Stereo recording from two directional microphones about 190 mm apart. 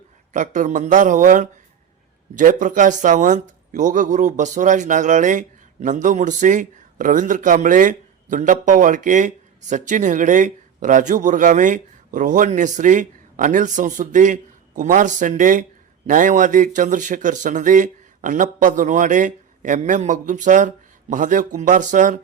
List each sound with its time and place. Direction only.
0.3 s a man's voice: 40° right (ahead or behind)